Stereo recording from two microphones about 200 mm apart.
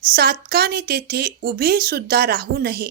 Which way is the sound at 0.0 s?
50° right (ahead or behind).